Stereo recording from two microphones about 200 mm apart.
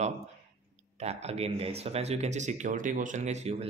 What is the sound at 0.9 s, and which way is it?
Speech, 30° right (ahead or behind).